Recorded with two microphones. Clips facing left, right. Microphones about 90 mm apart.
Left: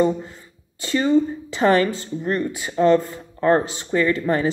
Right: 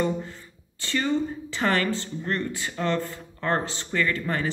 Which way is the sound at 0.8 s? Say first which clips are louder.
Left 7 dB; 15° left (ahead or behind).